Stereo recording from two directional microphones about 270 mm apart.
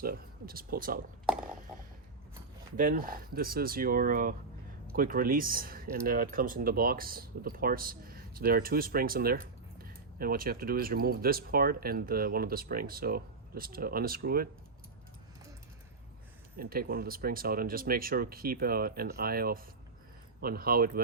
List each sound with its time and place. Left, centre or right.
0.0 s a sound: right
2.7 s speech: right
16.6 s speech: right